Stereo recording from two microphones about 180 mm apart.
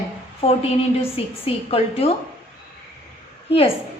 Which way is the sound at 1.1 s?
35° left (ahead or behind).